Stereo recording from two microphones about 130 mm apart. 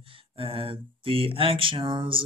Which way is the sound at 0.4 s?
45° right (ahead or behind).